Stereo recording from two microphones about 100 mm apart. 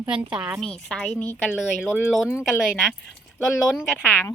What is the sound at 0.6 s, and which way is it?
Speech, 5° left (ahead or behind).